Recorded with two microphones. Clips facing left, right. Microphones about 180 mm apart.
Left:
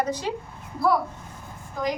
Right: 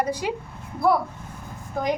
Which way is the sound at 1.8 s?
60° right (ahead or behind).